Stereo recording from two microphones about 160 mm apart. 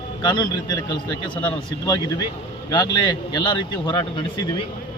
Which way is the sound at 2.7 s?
25° left (ahead or behind).